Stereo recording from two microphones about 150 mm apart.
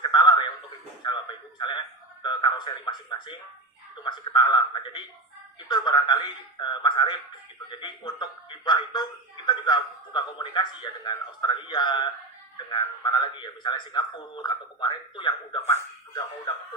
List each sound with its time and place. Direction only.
0.0 s a sound: 30° left (ahead or behind)
1.0 s radio: 30° left (ahead or behind)
4.0 s a man's voice: 30° left (ahead or behind)